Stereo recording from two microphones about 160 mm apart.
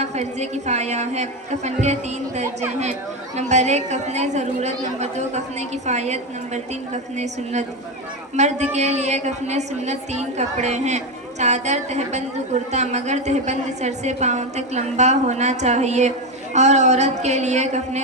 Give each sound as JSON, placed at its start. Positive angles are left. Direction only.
{"t": 0.0, "sound": "a woman's voice", "side_deg": -45}